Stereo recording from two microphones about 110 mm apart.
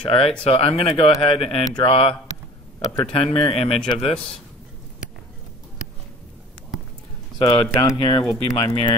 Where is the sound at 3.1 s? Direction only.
55° left (ahead or behind).